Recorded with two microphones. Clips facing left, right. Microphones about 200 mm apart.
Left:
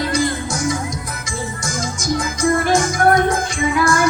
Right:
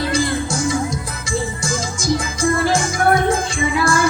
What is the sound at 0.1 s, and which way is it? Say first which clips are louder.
Music: even; 30° right (ahead or behind).